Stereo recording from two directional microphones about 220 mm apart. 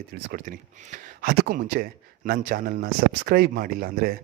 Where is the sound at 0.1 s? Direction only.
40° right (ahead or behind).